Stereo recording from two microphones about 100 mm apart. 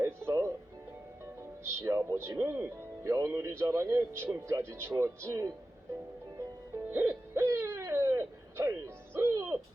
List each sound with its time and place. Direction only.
0.0 s music: 25° right (ahead or behind)
2.4 s speech: 20° right (ahead or behind)
3.0 s speech: 30° right (ahead or behind)
6.9 s hoot: 25° right (ahead or behind)